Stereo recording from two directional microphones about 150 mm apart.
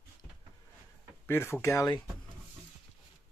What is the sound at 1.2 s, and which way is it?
Speech, 15° left (ahead or behind).